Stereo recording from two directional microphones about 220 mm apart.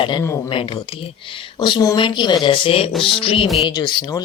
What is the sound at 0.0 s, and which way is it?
Speech, 20° left (ahead or behind).